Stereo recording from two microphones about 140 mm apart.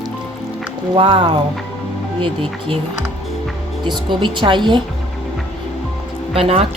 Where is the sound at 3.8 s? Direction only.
35° right (ahead or behind).